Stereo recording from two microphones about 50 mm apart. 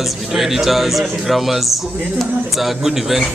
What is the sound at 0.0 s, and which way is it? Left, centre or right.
Speech, centre.